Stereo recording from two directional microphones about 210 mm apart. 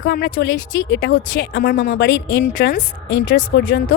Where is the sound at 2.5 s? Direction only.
40° left (ahead or behind).